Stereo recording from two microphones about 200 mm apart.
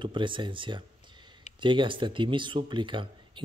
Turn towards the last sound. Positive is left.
turn(degrees=-25)  # may be behind; listen again after turning